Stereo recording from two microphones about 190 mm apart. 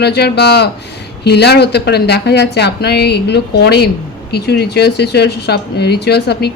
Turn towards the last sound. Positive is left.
turn(degrees=60)  # may be behind; listen again after turning